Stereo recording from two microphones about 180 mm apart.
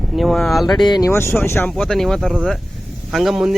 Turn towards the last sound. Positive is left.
turn(degrees=0)  # may be behind; listen again after turning